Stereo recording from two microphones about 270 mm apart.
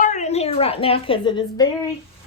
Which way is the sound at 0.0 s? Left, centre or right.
Left.